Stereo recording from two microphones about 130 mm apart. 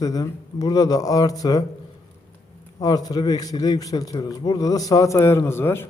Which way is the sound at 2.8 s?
30° left (ahead or behind).